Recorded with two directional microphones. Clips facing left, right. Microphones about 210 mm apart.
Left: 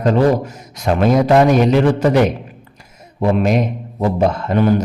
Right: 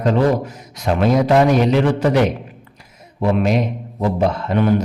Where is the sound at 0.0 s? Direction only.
45° left (ahead or behind).